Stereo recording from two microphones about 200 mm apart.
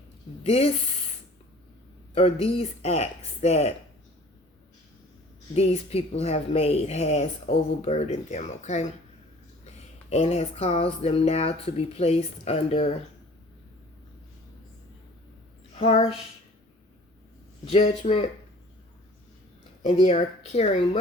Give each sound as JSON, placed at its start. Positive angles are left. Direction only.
{"t": 0.4, "sound": "speech", "side_deg": 30}
{"t": 2.1, "sound": "speech", "side_deg": 30}
{"t": 5.5, "sound": "speech", "side_deg": 30}
{"t": 15.8, "sound": "speech", "side_deg": 30}
{"t": 17.7, "sound": "speech", "side_deg": 35}
{"t": 20.0, "sound": "speech", "side_deg": 30}